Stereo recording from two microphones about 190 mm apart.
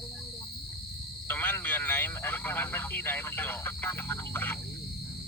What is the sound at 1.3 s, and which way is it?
Speech, 10° left (ahead or behind).